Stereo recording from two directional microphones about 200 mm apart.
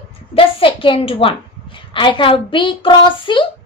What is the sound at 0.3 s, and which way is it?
A woman's voice, 25° left (ahead or behind).